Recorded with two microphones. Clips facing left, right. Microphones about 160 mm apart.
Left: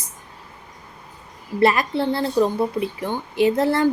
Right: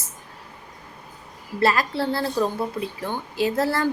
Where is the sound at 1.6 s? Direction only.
20° left (ahead or behind).